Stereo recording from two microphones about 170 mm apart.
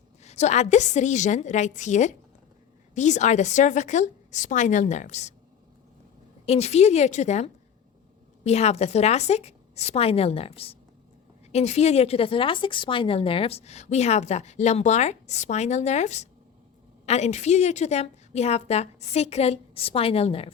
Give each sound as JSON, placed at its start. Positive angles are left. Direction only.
{"t": 0.2, "sound": "a woman's voice", "side_deg": 40}
{"t": 6.4, "sound": "speech", "side_deg": 40}